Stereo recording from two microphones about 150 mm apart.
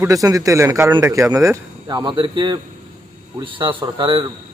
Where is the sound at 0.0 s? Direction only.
20° right (ahead or behind).